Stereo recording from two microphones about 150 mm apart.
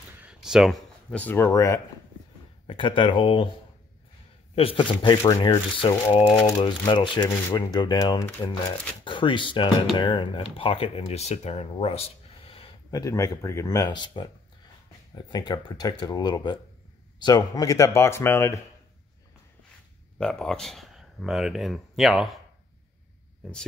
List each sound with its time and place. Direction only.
0.2 s a sound: 5° right (ahead or behind)
1.1 s speech: 10° left (ahead or behind)
2.6 s speech: 35° left (ahead or behind)
4.6 s speech: 35° left (ahead or behind)
12.9 s speech: 20° left (ahead or behind)
13.9 s speech: 30° left (ahead or behind); by 18.6 s 15° left (ahead or behind)
20.2 s speech: 5° left (ahead or behind)